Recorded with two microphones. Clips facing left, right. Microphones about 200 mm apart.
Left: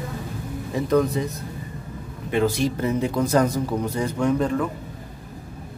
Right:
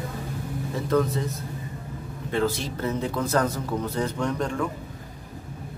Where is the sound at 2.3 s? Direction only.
15° left (ahead or behind).